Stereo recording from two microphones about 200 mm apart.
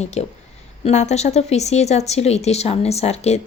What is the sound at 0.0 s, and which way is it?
A woman's voice, 35° left (ahead or behind).